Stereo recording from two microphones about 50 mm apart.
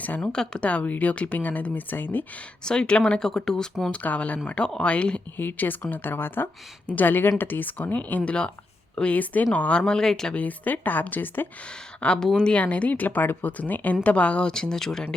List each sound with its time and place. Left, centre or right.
0.2 s speech: centre
0.6 s speech: left
2.6 s speech: centre
3.9 s speech: left
5.4 s speech: left
8.3 s speech: centre
9.1 s speech: left
9.8 s speech: centre
10.3 s speech: left
11.9 s speech: centre